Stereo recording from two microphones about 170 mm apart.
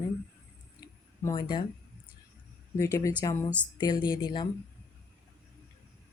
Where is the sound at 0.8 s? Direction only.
25° left (ahead or behind).